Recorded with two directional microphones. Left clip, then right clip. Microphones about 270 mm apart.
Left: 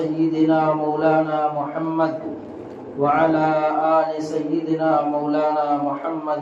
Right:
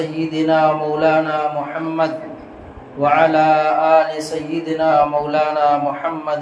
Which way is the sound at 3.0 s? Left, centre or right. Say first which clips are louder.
Right 4 dB; right.